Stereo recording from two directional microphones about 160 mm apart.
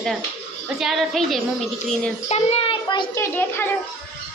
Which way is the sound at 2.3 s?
40° left (ahead or behind).